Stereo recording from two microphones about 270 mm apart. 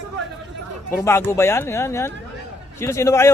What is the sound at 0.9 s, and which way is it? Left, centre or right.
Speech, centre.